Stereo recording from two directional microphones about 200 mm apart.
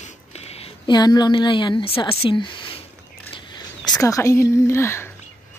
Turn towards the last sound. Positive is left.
turn(degrees=10)  # may be behind; listen again after turning